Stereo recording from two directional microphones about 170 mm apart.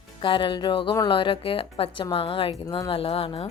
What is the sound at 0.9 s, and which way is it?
Speech, 30° left (ahead or behind).